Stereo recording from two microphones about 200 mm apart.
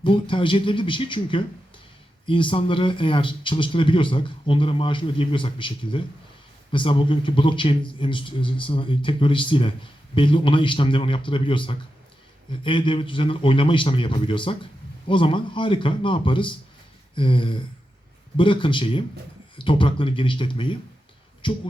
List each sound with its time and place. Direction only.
0.0 s a man's voice: 25° left (ahead or behind)